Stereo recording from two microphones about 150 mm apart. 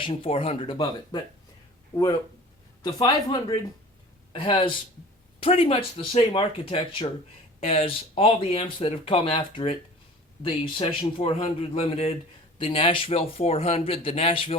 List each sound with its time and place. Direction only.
0.0 s speech: 40° left (ahead or behind)
2.8 s a woman's voice: 30° left (ahead or behind)